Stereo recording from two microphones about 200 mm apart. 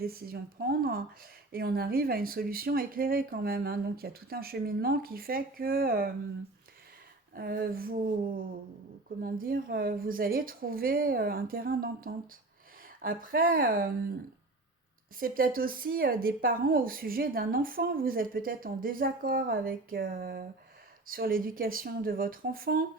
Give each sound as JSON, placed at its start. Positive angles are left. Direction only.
{"t": 0.0, "sound": "speech", "side_deg": -50}
{"t": 7.3, "sound": "speech", "side_deg": -45}
{"t": 15.2, "sound": "speech", "side_deg": -45}